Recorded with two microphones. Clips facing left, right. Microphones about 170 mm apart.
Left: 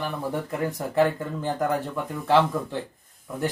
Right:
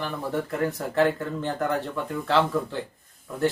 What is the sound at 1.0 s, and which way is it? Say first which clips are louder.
Speech: even; 10° left (ahead or behind).